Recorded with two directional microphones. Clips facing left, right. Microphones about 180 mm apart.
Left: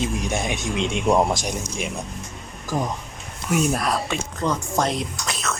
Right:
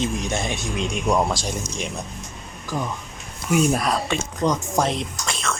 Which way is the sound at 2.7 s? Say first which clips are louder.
Left 2 dB; 45° left (ahead or behind).